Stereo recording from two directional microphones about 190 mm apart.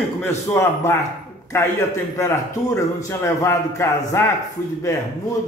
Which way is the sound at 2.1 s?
15° left (ahead or behind).